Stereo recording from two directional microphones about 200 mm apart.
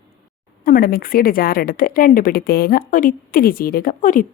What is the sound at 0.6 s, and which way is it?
A woman's voice, 45° left (ahead or behind).